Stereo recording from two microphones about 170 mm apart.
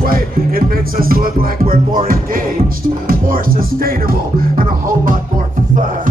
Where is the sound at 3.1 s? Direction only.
55° right (ahead or behind).